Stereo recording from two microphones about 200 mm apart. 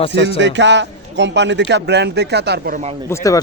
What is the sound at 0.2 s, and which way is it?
A man's voice, 65° right (ahead or behind).